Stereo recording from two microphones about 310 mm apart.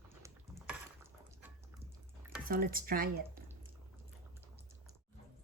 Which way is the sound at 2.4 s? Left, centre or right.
Right.